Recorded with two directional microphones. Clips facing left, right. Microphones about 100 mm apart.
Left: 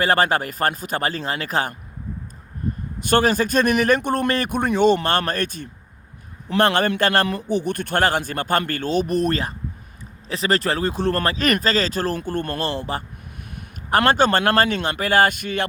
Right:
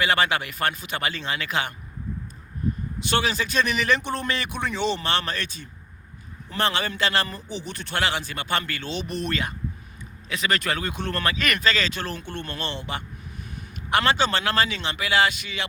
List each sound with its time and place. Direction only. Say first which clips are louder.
0.0 s speech: left 4 dB; 40° left (ahead or behind)
3.0 s a man's voice: left 7 dB; 45° left (ahead or behind)